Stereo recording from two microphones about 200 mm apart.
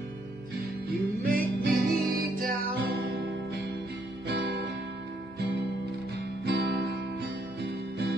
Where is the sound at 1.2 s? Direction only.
50° right (ahead or behind).